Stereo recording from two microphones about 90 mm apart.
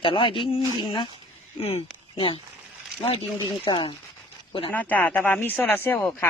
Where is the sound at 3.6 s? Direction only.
70° left (ahead or behind).